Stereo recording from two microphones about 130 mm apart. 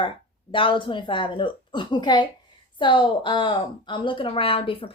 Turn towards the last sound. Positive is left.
turn(degrees=45)  # may be behind; listen again after turning